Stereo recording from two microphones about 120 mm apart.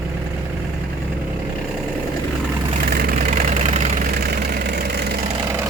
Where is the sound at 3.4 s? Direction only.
75° right (ahead or behind).